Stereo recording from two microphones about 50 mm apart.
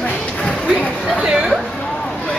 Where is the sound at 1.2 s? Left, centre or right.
Centre.